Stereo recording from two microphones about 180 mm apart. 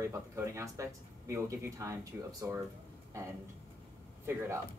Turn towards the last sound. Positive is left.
turn(degrees=-15)  # may be behind; listen again after turning